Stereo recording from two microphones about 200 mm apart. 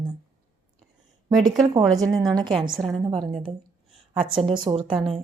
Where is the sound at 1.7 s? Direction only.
20° right (ahead or behind).